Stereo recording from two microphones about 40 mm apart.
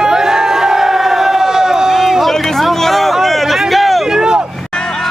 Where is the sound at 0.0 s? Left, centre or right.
Centre.